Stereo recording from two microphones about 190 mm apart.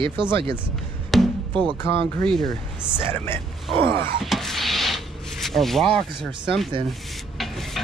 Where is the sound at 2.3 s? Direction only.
Centre (ahead or behind).